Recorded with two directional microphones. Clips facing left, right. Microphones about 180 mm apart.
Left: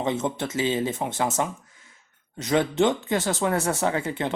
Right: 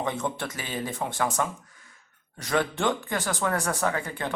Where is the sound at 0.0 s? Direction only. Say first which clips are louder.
Left 4 dB; 20° left (ahead or behind).